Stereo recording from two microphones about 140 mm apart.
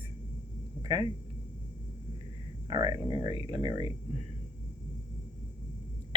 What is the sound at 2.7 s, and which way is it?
Speech, 35° right (ahead or behind).